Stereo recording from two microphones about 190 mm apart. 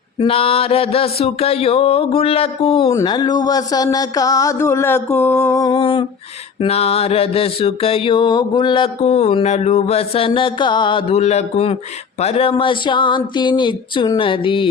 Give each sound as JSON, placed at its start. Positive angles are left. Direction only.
{"t": 0.2, "sound": "mantra", "side_deg": 30}
{"t": 2.9, "sound": "speech", "side_deg": 20}
{"t": 6.6, "sound": "mantra", "side_deg": 30}
{"t": 12.2, "sound": "speech", "side_deg": 30}